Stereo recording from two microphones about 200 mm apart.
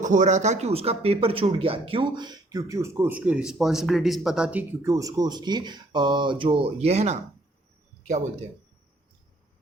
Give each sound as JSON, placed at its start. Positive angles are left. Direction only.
{"t": 0.0, "sound": "speech", "side_deg": -40}